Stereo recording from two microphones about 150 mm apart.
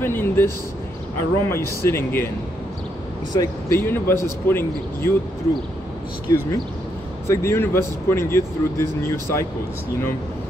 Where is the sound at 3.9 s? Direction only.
15° left (ahead or behind).